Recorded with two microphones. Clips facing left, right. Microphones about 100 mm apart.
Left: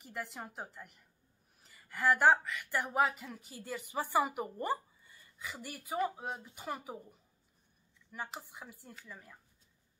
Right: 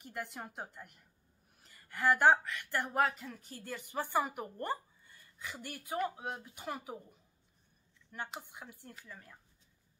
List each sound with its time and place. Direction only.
0.0 s speech: centre (ahead or behind)